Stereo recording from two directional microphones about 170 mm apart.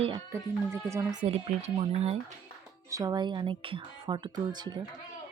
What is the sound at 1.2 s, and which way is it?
Speech, 35° right (ahead or behind).